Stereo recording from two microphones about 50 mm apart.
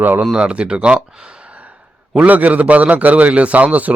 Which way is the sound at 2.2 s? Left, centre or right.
Right.